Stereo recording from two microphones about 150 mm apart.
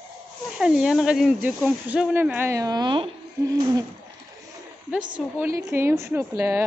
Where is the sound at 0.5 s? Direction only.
5° right (ahead or behind); by 3.1 s 35° right (ahead or behind).